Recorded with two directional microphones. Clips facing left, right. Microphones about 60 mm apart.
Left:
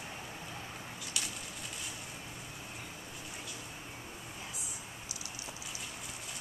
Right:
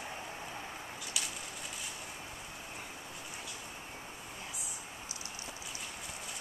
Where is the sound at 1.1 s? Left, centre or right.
Centre.